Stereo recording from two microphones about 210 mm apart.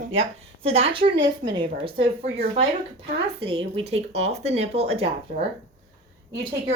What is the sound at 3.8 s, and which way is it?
Speech, 30° right (ahead or behind).